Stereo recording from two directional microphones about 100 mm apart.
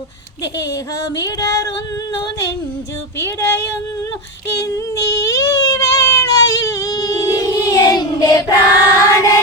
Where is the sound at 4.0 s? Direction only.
30° left (ahead or behind).